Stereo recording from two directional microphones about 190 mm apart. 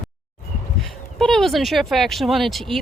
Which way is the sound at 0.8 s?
Centre (ahead or behind).